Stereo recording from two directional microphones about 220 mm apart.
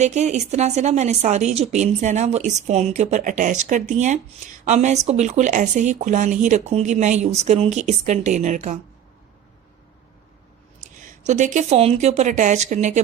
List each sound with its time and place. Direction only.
0.0 s speech: 30° right (ahead or behind)
11.0 s speech: 35° right (ahead or behind)